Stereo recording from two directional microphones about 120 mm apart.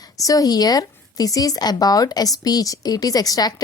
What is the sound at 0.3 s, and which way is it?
Speech, 30° left (ahead or behind).